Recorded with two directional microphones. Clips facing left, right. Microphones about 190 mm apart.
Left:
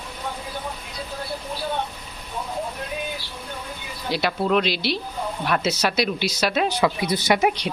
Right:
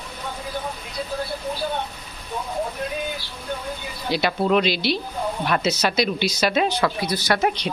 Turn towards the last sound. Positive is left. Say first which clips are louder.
# left 1 dB
turn(degrees=10)  # may be behind; listen again after turning